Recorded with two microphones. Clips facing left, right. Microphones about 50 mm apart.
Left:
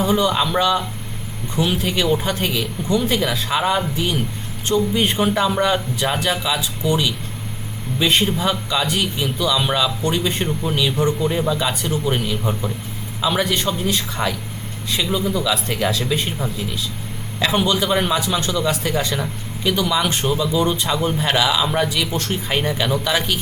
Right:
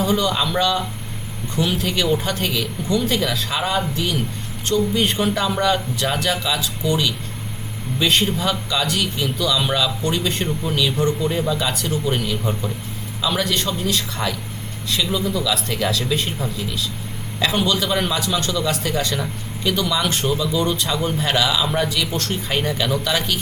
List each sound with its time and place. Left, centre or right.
0.0 s speech: centre